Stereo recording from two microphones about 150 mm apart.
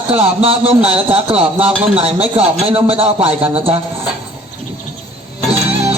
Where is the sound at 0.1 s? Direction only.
40° right (ahead or behind).